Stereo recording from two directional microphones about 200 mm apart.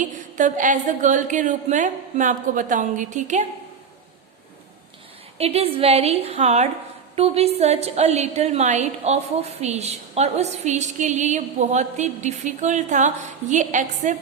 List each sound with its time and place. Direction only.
0.0 s a woman's voice: 40° right (ahead or behind)
5.4 s a woman's voice: 30° right (ahead or behind)